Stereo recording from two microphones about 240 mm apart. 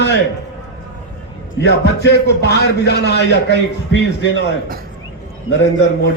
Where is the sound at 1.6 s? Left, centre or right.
Left.